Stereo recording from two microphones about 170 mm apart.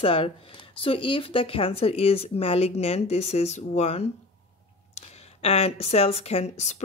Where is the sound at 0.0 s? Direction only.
35° left (ahead or behind).